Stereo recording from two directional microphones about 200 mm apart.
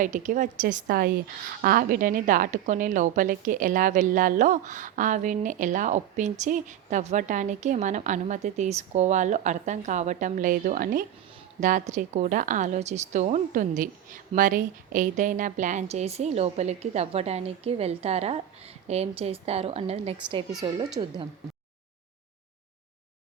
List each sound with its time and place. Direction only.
0.0 s a woman's voice: 40° right (ahead or behind); by 20.8 s 20° right (ahead or behind)